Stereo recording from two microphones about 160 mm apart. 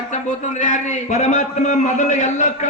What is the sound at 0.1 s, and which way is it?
A man's voice, 50° left (ahead or behind).